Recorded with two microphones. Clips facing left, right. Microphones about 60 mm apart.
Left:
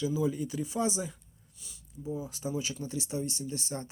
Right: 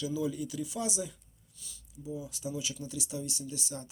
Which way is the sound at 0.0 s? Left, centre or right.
Left.